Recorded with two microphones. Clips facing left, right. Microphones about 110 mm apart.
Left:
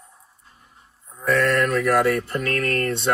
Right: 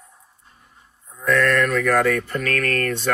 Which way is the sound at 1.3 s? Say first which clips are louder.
Right 1 dB; centre (ahead or behind).